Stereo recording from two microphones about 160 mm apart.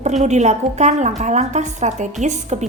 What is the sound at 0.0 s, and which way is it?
A woman's voice, 45° right (ahead or behind).